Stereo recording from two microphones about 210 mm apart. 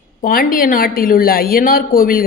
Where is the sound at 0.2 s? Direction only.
45° left (ahead or behind).